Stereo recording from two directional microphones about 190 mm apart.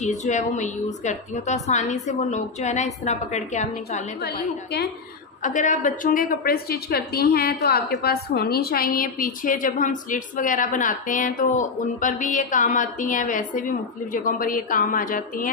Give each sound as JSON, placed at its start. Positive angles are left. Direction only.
{"t": 0.0, "sound": "a woman's voice", "side_deg": 40}
{"t": 4.2, "sound": "a woman's voice", "side_deg": 55}
{"t": 5.4, "sound": "a woman's voice", "side_deg": 40}